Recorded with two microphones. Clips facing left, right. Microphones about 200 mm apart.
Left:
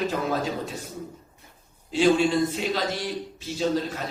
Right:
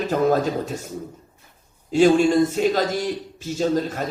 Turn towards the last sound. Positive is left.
turn(degrees=-45)  # may be behind; listen again after turning